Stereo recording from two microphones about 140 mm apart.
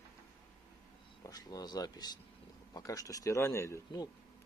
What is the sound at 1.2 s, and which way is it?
Speech, 25° left (ahead or behind).